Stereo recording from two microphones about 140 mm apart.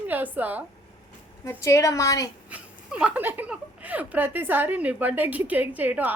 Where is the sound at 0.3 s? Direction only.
10° right (ahead or behind).